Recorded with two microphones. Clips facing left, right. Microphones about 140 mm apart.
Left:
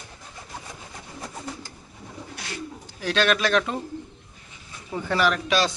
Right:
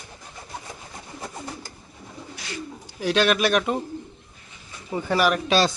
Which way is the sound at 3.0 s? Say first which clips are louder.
Right 2 dB; 15° right (ahead or behind).